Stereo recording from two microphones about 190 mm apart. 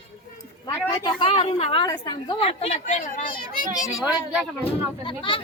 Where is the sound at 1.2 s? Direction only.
30° left (ahead or behind); by 3.7 s 45° left (ahead or behind).